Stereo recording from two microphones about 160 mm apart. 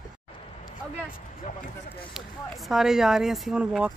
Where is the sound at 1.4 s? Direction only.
50° left (ahead or behind).